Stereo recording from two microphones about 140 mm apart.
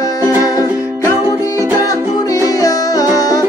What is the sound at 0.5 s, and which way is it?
Music, 25° left (ahead or behind).